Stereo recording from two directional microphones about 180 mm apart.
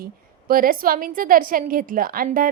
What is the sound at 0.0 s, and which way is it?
A woman's voice, 55° right (ahead or behind).